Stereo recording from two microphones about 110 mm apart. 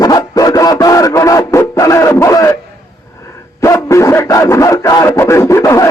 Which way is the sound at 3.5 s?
30° left (ahead or behind).